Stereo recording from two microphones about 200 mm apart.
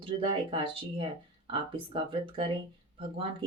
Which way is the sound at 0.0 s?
25° right (ahead or behind).